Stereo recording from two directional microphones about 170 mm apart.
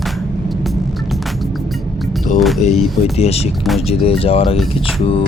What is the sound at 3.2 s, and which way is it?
Speech, 35° left (ahead or behind).